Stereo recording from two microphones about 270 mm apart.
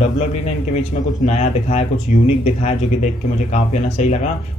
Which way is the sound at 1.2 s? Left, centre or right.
Left.